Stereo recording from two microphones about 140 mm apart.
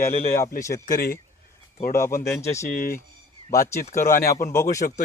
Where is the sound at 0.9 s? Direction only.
90° left.